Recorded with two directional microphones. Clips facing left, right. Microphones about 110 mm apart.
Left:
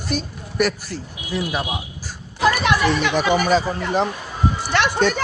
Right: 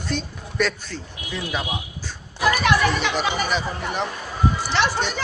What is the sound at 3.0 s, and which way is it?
Speech, 50° left (ahead or behind).